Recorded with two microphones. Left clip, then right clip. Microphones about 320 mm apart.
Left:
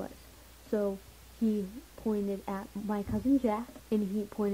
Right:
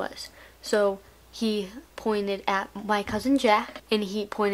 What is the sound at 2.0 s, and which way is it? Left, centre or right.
A woman's voice, centre.